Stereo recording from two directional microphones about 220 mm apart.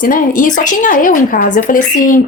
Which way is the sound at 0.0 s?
40° left (ahead or behind).